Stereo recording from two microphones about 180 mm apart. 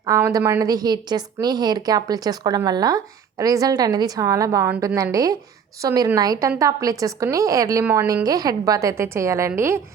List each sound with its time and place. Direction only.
0.0 s a woman's voice: 20° right (ahead or behind)